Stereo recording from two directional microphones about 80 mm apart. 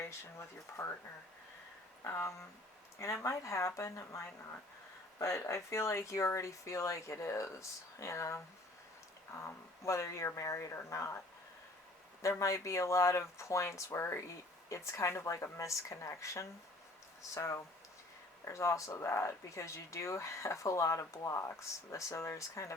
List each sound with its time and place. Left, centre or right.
0.0 s speech: left
2.0 s speech: left
5.2 s speech: left
12.4 s speech: left